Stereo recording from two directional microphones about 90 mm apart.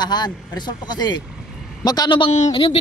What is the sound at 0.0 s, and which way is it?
Speech, 50° left (ahead or behind).